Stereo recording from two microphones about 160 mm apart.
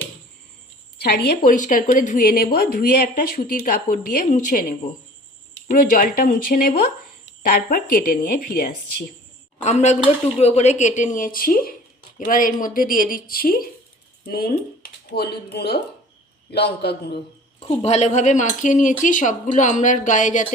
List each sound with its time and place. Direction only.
0.9 s a woman's voice: 90° left; by 9.0 s 70° left (ahead or behind)
9.6 s a woman's voice: 45° left (ahead or behind); by 14.5 s 70° left (ahead or behind)
14.8 s a man's voice: 85° left
17.6 s speech: 45° left (ahead or behind)